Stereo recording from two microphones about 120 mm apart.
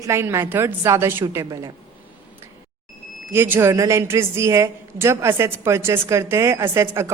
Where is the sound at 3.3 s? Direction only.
20° right (ahead or behind).